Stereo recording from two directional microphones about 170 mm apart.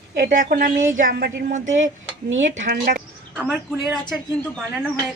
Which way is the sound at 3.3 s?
Centre (ahead or behind).